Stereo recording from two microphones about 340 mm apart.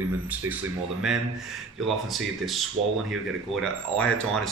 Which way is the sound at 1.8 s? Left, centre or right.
Centre.